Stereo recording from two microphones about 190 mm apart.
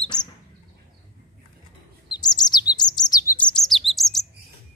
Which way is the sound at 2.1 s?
20° left (ahead or behind).